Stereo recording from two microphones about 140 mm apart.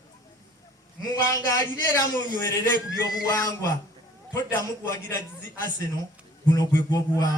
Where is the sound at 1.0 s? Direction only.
25° left (ahead or behind).